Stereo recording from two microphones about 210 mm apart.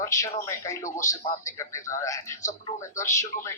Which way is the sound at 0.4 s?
15° left (ahead or behind).